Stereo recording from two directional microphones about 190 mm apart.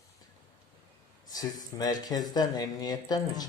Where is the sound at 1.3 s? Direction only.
20° left (ahead or behind).